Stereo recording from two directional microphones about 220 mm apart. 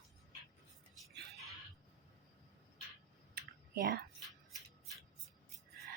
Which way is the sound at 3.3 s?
45° right (ahead or behind).